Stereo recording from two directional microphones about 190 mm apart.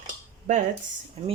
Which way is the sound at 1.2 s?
35° right (ahead or behind).